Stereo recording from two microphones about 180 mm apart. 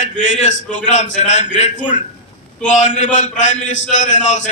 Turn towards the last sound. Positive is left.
turn(degrees=40)  # may be behind; listen again after turning